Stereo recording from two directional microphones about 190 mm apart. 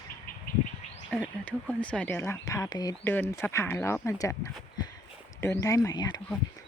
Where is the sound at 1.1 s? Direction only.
5° left (ahead or behind).